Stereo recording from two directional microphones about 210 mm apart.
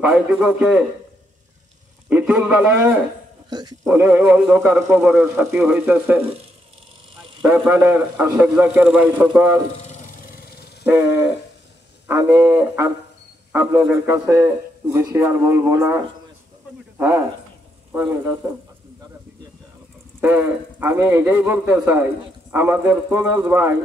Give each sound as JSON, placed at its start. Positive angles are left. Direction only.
{"t": 0.0, "sound": "a man's voice", "side_deg": -5}
{"t": 2.0, "sound": "speech", "side_deg": -5}
{"t": 7.4, "sound": "speech", "side_deg": -5}
{"t": 10.3, "sound": "wild animals", "side_deg": 50}
{"t": 10.9, "sound": "speech", "side_deg": -10}
{"t": 17.9, "sound": "speech", "side_deg": -10}
{"t": 20.2, "sound": "speech", "side_deg": -10}